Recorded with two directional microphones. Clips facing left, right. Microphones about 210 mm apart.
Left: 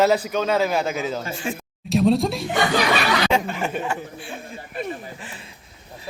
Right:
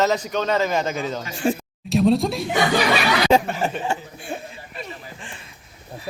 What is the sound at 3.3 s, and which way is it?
Speech, 35° right (ahead or behind).